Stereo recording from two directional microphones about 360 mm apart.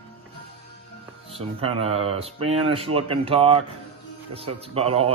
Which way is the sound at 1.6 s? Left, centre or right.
Centre.